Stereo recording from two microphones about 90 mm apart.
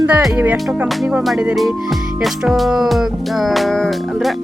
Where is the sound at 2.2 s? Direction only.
5° right (ahead or behind).